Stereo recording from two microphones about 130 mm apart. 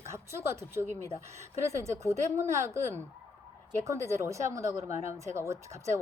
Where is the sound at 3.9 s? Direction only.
20° right (ahead or behind).